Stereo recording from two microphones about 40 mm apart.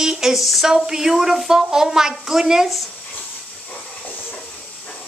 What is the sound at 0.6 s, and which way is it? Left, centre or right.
A woman's voice, centre.